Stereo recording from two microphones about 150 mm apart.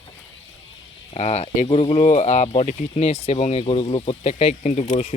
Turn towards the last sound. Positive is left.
turn(degrees=50)  # may be behind; listen again after turning